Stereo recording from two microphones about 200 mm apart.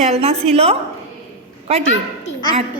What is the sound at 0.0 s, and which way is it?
Speech, 30° right (ahead or behind).